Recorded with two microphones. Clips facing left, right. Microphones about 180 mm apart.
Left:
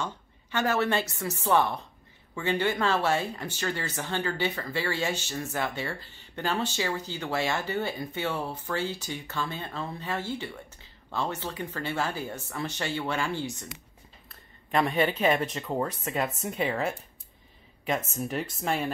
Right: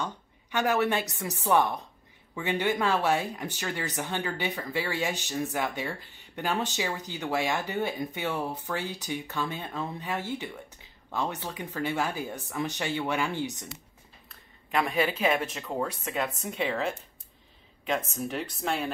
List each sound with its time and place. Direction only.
0.0 s speech: 15° right (ahead or behind)
14.7 s speech: 5° right (ahead or behind)
18.3 s speech: centre (ahead or behind)